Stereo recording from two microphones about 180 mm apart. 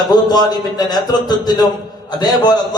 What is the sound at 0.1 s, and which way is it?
Speech, 20° left (ahead or behind).